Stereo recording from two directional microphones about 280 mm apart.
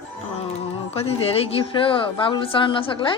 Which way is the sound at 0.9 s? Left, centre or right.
Left.